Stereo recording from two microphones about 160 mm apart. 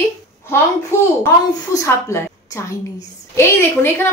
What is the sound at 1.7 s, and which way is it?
A woman's voice, 20° left (ahead or behind).